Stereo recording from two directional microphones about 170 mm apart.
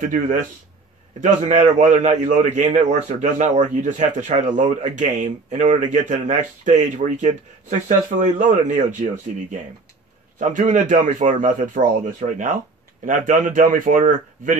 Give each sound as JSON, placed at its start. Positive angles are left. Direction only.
{"t": 0.0, "sound": "a man's voice", "side_deg": -50}
{"t": 10.4, "sound": "a man's voice", "side_deg": -50}